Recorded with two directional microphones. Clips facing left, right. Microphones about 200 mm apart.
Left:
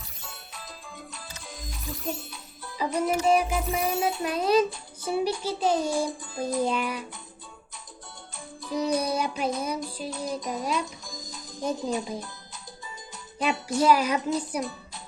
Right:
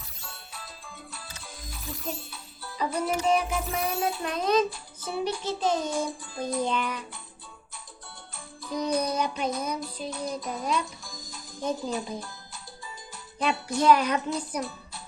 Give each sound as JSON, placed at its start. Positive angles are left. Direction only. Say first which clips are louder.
{"t": 1.9, "sound": "music", "louder": "left 2 dB", "side_deg": 0}
{"t": 6.3, "sound": "music", "louder": "left 2 dB", "side_deg": 5}
{"t": 8.7, "sound": "music", "louder": "left 1 dB", "side_deg": 5}
{"t": 11.0, "sound": "music", "louder": "left 3 dB", "side_deg": 20}
{"t": 13.4, "sound": "a child's voice", "louder": "left 1 dB", "side_deg": 5}